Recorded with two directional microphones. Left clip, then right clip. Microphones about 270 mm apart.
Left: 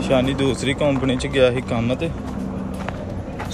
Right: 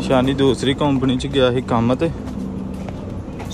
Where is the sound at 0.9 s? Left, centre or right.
Centre.